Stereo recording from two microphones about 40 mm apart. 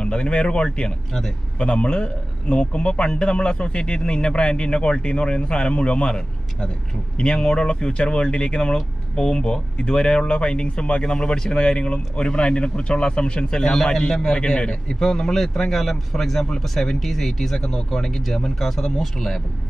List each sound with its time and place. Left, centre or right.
0.0 s a man's voice: left; by 19.4 s centre